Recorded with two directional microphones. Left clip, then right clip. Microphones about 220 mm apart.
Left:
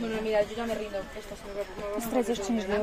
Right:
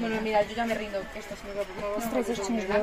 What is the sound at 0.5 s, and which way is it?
Speech, 30° right (ahead or behind).